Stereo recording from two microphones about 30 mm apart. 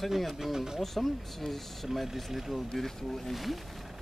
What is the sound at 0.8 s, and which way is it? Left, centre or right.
Speech, centre.